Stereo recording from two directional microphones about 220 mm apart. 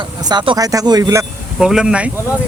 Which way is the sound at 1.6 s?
5° right (ahead or behind).